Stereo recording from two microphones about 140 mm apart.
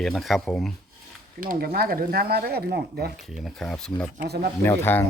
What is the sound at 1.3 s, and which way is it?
Speech, 90° right.